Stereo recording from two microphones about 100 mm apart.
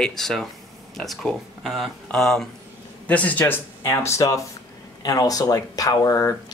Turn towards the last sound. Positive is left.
turn(degrees=30)  # may be behind; listen again after turning